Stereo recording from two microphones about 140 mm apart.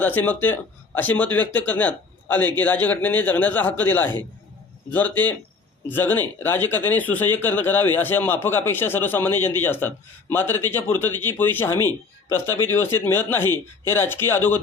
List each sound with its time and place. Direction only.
0.0 s a man's voice: 10° left (ahead or behind)